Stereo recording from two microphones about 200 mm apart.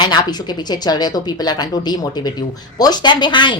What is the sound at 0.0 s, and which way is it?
Speech, 20° left (ahead or behind).